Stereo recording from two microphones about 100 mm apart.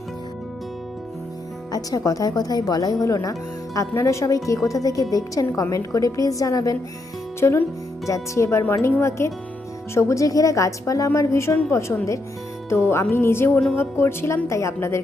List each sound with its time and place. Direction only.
1.7 s a woman's voice: 35° left (ahead or behind)